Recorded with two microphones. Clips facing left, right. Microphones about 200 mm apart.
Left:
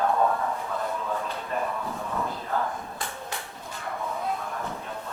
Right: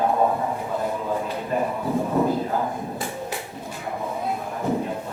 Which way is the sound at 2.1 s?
30° right (ahead or behind).